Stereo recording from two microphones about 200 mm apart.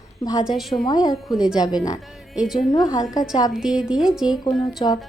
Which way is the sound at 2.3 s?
Centre (ahead or behind).